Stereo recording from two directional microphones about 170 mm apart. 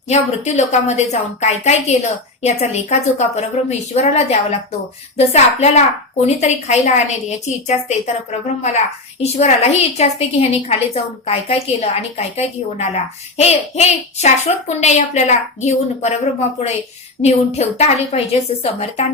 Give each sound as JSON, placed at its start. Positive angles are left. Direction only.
{"t": 0.1, "sound": "a woman's voice", "side_deg": 40}